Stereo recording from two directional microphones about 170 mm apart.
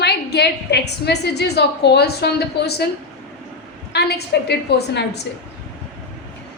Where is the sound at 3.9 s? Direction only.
75° left (ahead or behind).